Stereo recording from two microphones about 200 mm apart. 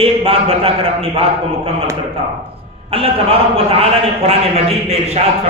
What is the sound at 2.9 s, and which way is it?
A man's voice, 30° right (ahead or behind).